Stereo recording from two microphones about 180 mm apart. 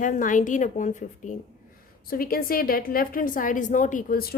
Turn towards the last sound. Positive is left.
turn(degrees=50)  # may be behind; listen again after turning